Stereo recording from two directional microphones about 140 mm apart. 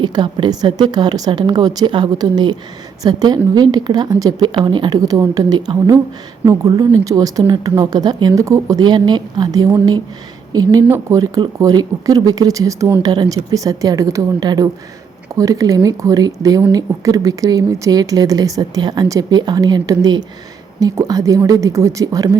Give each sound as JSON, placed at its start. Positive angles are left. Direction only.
{"t": 0.0, "sound": "a woman's voice", "side_deg": -35}